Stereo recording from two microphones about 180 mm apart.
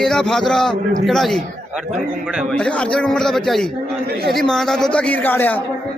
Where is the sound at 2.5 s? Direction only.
5° left (ahead or behind).